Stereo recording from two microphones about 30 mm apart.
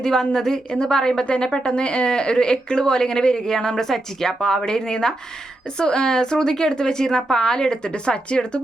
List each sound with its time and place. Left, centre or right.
0.0 s speech: centre; by 8.6 s left